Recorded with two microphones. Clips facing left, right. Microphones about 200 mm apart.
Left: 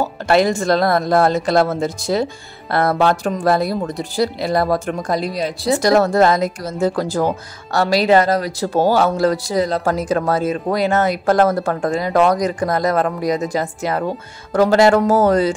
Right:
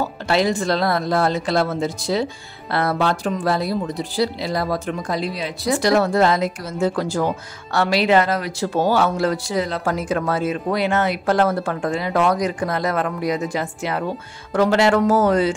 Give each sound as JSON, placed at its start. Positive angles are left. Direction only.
{"t": 0.3, "sound": "speech", "side_deg": 45}